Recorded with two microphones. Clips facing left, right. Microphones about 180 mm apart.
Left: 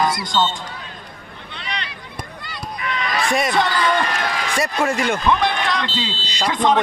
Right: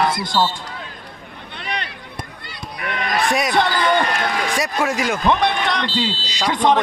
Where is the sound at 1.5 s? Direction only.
50° right (ahead or behind).